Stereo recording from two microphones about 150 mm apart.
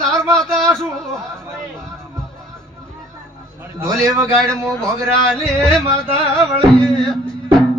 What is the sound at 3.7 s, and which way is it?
Speech, 20° right (ahead or behind).